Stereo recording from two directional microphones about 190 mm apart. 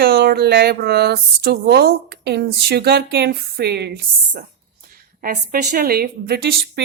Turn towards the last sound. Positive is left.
turn(degrees=-55)  # may be behind; listen again after turning